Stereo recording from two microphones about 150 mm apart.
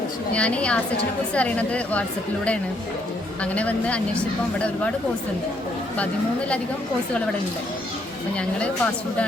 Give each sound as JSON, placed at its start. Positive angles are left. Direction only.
{"t": 0.3, "sound": "a woman's voice", "side_deg": 10}
{"t": 8.4, "sound": "a woman's voice", "side_deg": 10}